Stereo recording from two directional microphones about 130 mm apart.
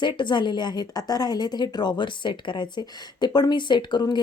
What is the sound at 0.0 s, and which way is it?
A woman's voice, 35° left (ahead or behind).